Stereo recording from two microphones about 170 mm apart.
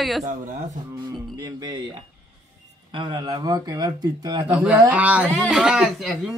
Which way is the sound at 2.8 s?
25° right (ahead or behind).